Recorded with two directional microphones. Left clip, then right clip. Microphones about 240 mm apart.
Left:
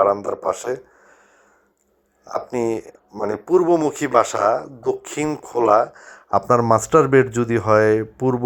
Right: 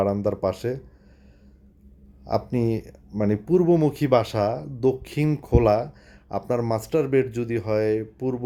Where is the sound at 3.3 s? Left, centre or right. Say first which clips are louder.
Left 4 dB; centre.